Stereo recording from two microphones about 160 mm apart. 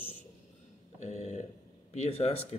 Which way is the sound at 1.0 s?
45° left (ahead or behind).